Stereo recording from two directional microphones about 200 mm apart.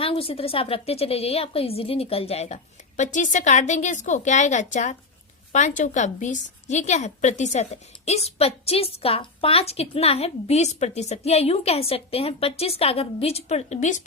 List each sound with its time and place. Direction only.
0.0 s a woman's voice: 30° left (ahead or behind)